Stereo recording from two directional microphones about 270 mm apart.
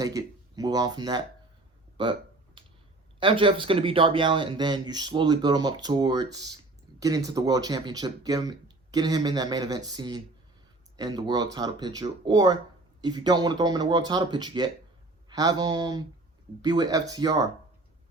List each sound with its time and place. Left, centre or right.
0.0 s speech: centre
2.6 s a sound: centre
3.2 s speech: centre